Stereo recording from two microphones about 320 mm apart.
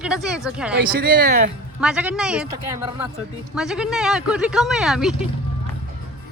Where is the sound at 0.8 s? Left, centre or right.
Right.